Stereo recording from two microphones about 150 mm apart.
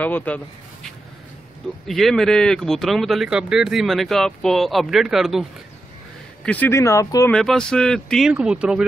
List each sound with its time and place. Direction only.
0.0 s speech: 10° left (ahead or behind)
1.9 s speech: centre (ahead or behind)
6.4 s speech: 10° left (ahead or behind)
7.2 s speech: 5° left (ahead or behind)
8.3 s speech: 5° right (ahead or behind)